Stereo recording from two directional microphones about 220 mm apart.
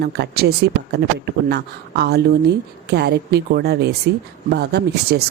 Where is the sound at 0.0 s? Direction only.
50° right (ahead or behind).